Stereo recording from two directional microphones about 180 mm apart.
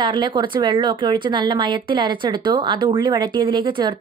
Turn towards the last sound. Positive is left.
turn(degrees=-25)  # may be behind; listen again after turning